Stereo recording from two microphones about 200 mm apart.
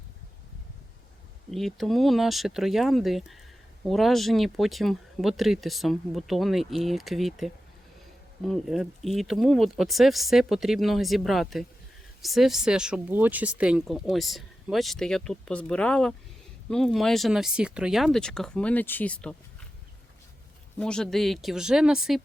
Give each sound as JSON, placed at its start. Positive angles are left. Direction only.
{"t": 1.5, "sound": "speech", "side_deg": 0}
{"t": 20.7, "sound": "speech", "side_deg": 5}